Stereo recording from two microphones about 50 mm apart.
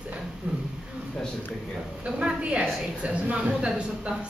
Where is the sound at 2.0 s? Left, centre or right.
Right.